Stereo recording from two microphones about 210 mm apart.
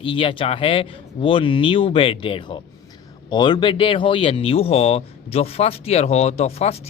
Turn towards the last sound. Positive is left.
turn(degrees=30)  # may be behind; listen again after turning